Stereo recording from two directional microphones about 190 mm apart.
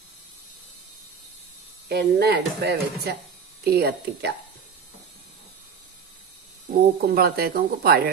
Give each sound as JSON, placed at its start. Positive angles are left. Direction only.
{"t": 1.9, "sound": "speech", "side_deg": -60}
{"t": 6.8, "sound": "speech", "side_deg": -55}